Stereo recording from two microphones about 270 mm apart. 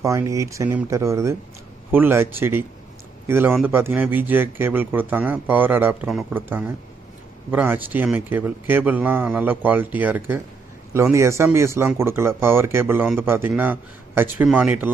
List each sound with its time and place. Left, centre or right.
0.0 s speech: centre